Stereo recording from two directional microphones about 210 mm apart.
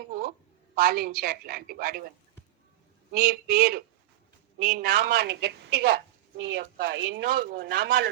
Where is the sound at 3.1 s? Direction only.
45° right (ahead or behind).